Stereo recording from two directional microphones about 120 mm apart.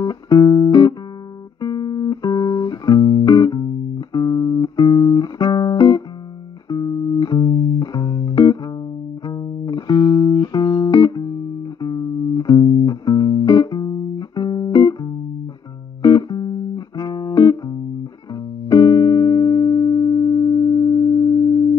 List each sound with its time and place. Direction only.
0.0 s music: 35° left (ahead or behind)